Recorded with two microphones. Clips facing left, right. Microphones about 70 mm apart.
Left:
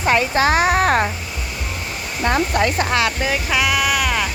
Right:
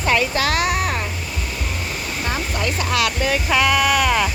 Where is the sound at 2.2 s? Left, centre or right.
Left.